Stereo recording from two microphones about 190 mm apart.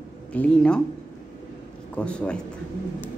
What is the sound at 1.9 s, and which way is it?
Speech, 5° left (ahead or behind).